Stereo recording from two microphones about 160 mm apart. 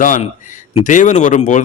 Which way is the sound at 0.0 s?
55° left (ahead or behind).